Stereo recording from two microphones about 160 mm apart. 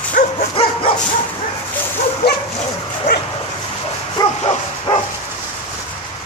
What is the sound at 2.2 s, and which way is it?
Dog, 90° left.